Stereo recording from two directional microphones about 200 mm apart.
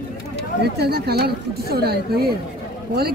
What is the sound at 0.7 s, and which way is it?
Speech, 55° right (ahead or behind).